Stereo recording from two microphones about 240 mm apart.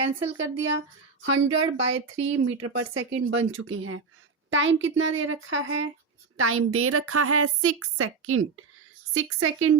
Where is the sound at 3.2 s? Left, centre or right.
Right.